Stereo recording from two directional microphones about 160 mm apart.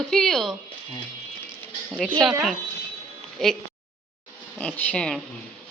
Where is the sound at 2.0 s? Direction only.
5° left (ahead or behind).